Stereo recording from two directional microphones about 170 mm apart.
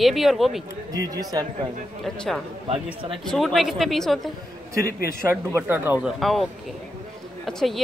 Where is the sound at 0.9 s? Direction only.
20° right (ahead or behind).